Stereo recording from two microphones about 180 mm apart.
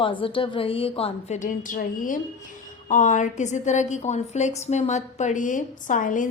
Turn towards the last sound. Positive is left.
turn(degrees=45)  # may be behind; listen again after turning